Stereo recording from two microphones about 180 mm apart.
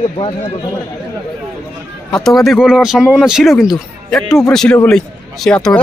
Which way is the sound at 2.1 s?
Centre (ahead or behind).